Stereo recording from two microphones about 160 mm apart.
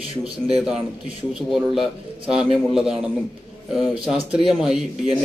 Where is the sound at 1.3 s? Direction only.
Centre (ahead or behind).